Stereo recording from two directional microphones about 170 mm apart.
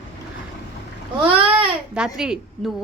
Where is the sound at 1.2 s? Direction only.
30° right (ahead or behind).